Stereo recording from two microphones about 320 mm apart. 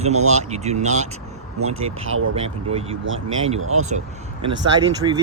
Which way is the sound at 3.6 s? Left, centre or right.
Right.